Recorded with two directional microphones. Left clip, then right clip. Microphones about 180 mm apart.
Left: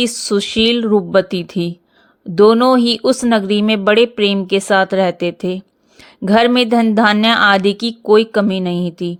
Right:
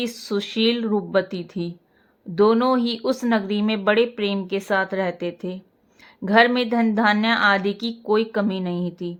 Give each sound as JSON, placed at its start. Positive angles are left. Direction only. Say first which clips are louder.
{"t": 0.0, "sound": "speech", "louder": "left 9 dB", "side_deg": 40}